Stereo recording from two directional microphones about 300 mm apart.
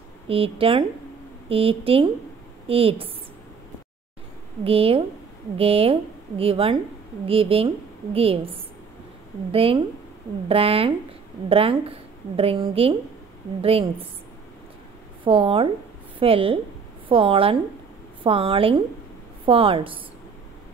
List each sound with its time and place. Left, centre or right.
0.3 s a woman's voice: centre
4.6 s a woman's voice: centre
9.5 s a woman's voice: centre
15.2 s a woman's voice: centre